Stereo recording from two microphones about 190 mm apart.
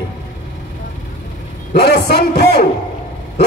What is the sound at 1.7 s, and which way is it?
Speech, 60° left (ahead or behind).